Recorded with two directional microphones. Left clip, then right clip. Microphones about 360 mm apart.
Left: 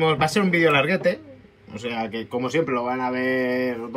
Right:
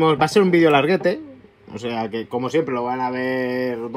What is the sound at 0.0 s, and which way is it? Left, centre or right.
Speech, centre.